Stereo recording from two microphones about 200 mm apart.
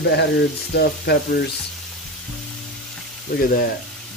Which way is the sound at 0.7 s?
55° left (ahead or behind).